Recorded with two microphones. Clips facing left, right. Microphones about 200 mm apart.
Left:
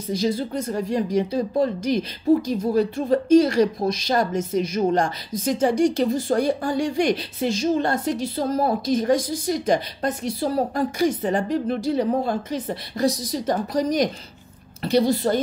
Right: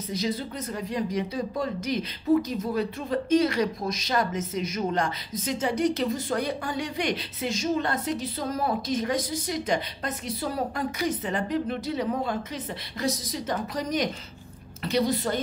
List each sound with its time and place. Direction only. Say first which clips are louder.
0.1 s speech: left 7 dB; 30° left (ahead or behind)